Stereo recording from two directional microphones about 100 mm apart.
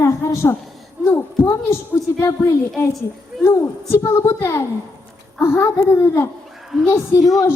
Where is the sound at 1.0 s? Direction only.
25° left (ahead or behind).